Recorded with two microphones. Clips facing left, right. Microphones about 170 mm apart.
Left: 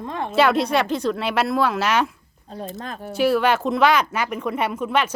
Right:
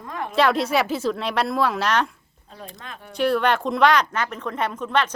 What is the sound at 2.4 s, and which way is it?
Speech, 35° left (ahead or behind).